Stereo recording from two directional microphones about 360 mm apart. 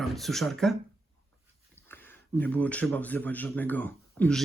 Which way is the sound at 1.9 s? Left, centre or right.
Centre.